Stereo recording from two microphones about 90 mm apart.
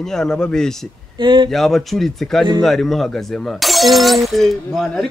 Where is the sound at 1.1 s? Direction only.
60° right (ahead or behind).